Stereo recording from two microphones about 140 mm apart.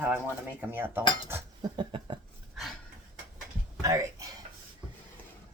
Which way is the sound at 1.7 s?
35° right (ahead or behind).